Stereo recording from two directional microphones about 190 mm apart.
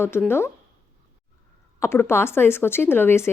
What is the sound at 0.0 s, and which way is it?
Speech, 10° left (ahead or behind).